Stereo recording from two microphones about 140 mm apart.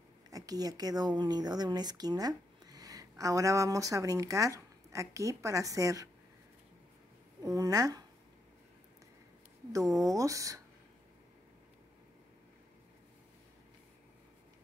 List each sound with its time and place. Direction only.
0.3 s a woman's voice: 25° right (ahead or behind)
7.4 s speech: 25° right (ahead or behind)
9.7 s speech: 25° right (ahead or behind)